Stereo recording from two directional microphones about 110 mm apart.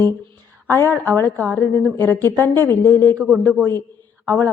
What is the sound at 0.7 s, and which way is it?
A woman's voice, 20° left (ahead or behind).